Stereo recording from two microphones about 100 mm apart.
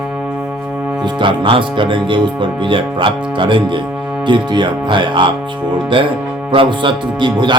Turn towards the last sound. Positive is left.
turn(degrees=-50)  # may be behind; listen again after turning